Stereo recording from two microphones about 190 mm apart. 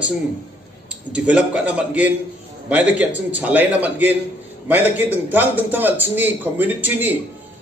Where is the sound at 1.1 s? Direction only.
5° right (ahead or behind).